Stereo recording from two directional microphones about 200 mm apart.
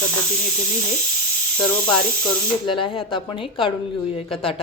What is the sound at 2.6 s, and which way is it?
Speech, 25° left (ahead or behind).